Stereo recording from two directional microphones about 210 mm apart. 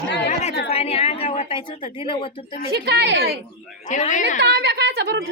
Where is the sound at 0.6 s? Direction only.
30° left (ahead or behind).